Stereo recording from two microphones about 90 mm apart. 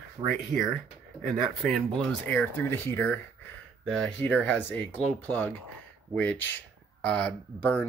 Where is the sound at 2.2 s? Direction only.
20° left (ahead or behind).